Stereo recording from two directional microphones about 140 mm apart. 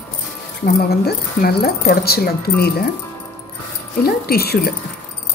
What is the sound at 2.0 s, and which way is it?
Speech, 90° left.